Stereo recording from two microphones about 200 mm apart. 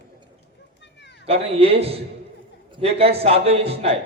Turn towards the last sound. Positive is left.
turn(degrees=-30)  # may be behind; listen again after turning